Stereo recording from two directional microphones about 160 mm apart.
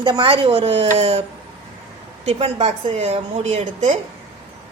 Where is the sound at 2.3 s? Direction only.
40° right (ahead or behind).